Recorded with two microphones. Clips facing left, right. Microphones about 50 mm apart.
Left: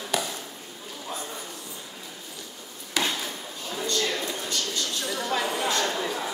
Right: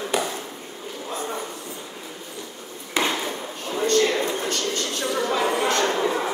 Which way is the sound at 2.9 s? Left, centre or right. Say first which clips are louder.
Right 4 dB; right.